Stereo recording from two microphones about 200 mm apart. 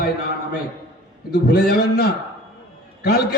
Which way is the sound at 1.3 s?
50° left (ahead or behind).